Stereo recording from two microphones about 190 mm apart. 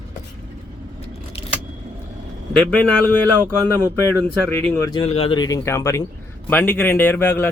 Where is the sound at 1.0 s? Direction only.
30° left (ahead or behind).